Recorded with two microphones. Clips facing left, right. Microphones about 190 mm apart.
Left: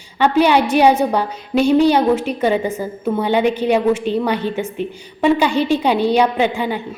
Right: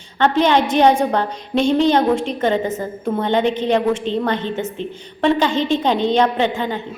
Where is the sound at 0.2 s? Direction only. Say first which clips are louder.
Left 2 dB; 10° left (ahead or behind).